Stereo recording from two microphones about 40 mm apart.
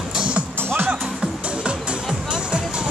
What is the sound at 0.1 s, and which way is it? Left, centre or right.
Music, right.